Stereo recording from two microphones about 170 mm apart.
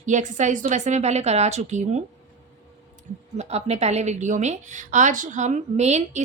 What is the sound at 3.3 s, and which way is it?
A woman's voice, 40° right (ahead or behind).